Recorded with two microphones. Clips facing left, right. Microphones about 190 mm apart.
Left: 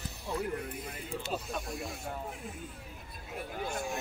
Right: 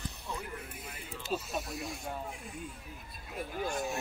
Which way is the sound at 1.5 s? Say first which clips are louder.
Even; centre (ahead or behind).